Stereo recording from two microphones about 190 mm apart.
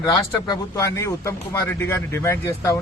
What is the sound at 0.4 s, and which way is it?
Speech, 20° left (ahead or behind).